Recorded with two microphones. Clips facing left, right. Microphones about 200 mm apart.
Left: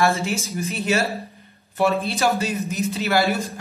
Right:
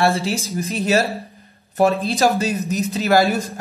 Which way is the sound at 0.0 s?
35° right (ahead or behind).